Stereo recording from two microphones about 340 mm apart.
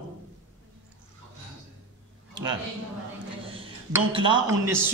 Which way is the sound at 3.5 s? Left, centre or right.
Centre.